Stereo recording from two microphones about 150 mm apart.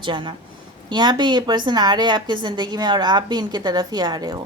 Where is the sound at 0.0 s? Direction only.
35° right (ahead or behind).